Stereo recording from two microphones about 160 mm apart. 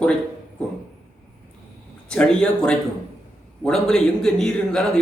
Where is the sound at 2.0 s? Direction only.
5° left (ahead or behind).